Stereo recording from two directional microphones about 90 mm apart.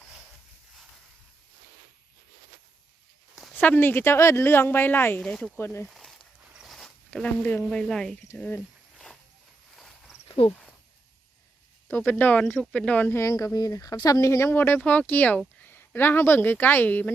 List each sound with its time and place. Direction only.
3.5 s speech: 20° left (ahead or behind)
5.9 s a sound: 5° left (ahead or behind)
6.7 s zipper: 5° left (ahead or behind)
7.1 s speech: 15° left (ahead or behind)
11.9 s speech: 25° left (ahead or behind)
13.1 s speech: 35° left (ahead or behind); by 17.1 s 20° left (ahead or behind)